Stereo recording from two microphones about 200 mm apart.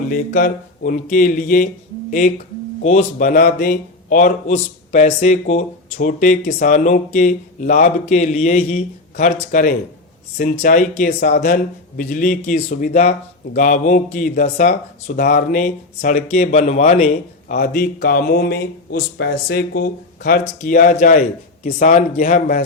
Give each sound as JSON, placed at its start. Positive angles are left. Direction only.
{"t": 0.1, "sound": "speech", "side_deg": 40}
{"t": 17.5, "sound": "speech", "side_deg": 50}